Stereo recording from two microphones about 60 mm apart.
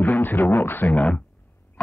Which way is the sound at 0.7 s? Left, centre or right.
Left.